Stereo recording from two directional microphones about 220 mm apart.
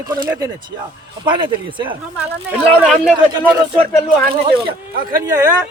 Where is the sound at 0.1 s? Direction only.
15° right (ahead or behind).